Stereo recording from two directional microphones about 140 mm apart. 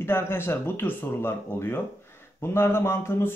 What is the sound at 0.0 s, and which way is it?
Speech, 15° left (ahead or behind).